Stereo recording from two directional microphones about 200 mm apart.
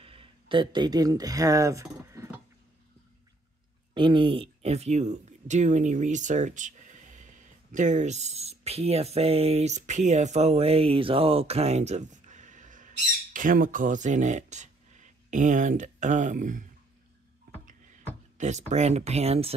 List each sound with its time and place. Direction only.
0.0 s speech: 25° right (ahead or behind)
3.9 s speech: 25° right (ahead or behind); by 16.6 s 40° right (ahead or behind)
17.6 s music: 40° right (ahead or behind)
18.4 s speech: 35° right (ahead or behind)